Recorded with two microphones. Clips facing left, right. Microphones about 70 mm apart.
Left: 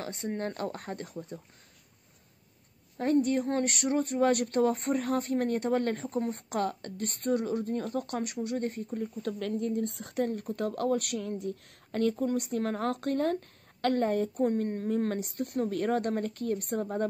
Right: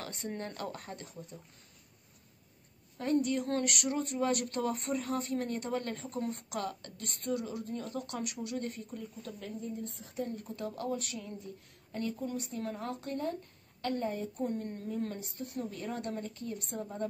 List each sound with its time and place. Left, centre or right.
0.0 s speech: left
3.0 s speech: left
9.4 s speech: left
10.4 s speech: left